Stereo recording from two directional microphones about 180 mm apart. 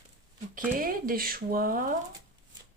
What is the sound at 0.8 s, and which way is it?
A woman's voice, 50° right (ahead or behind).